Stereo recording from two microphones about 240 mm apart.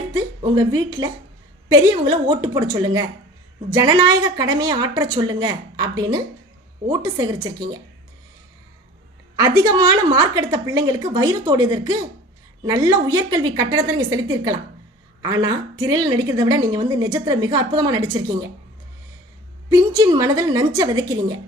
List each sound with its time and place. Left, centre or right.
0.1 s a woman's voice: centre
9.3 s a woman's voice: centre
19.7 s a woman's voice: centre